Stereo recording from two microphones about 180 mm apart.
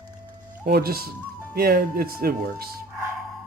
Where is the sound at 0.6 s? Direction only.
55° right (ahead or behind).